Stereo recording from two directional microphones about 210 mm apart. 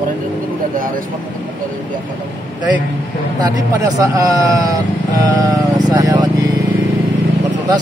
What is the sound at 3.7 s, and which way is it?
Speech, 15° right (ahead or behind).